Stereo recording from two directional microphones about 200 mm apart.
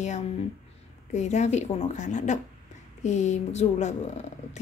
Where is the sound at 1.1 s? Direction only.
35° left (ahead or behind).